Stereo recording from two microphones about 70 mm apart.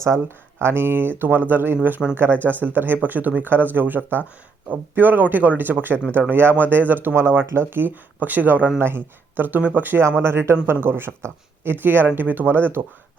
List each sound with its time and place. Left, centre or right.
0.6 s speech: right
10.0 s speech: right